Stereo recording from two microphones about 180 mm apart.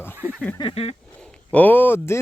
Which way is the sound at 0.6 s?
35° left (ahead or behind).